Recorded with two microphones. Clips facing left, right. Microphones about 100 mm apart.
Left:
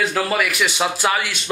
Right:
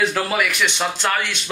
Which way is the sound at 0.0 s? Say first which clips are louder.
Even; centre (ahead or behind).